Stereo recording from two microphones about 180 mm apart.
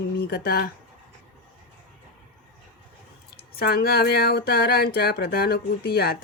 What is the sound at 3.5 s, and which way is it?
Speech, 55° left (ahead or behind).